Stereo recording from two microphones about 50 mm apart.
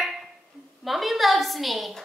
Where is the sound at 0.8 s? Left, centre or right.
Centre.